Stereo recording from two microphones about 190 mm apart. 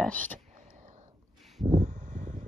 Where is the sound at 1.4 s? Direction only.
Centre (ahead or behind).